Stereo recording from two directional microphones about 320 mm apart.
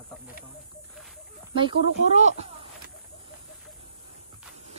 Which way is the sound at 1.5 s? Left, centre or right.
Centre.